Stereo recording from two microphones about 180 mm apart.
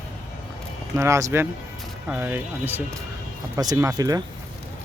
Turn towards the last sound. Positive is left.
turn(degrees=-20)  # may be behind; listen again after turning